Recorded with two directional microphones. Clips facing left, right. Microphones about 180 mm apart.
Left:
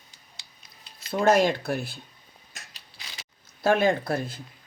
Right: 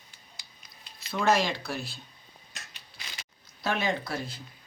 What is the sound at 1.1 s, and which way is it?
Speech, 50° left (ahead or behind).